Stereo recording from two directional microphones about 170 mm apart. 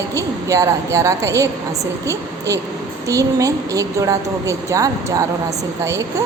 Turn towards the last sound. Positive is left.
turn(degrees=-20)  # may be behind; listen again after turning